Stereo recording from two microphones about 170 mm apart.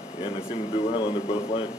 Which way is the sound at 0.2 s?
35° left (ahead or behind).